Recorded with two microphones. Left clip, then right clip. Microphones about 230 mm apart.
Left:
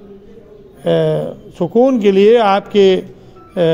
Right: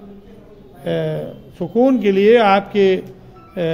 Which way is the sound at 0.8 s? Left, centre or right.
Left.